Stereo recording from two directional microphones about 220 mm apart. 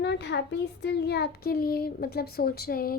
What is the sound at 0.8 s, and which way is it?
A woman's voice, 50° left (ahead or behind).